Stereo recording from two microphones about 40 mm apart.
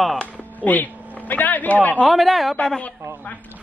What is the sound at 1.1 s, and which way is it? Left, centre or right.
Speech, left.